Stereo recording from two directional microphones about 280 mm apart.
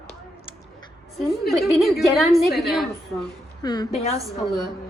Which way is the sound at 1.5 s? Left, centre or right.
Centre.